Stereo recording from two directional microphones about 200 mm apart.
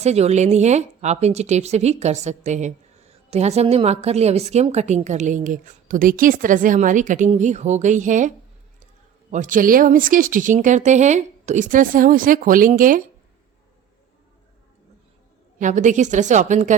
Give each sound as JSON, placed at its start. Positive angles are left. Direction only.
{"t": 0.0, "sound": "speech", "side_deg": -35}
{"t": 9.3, "sound": "speech", "side_deg": -40}
{"t": 15.6, "sound": "speech", "side_deg": -40}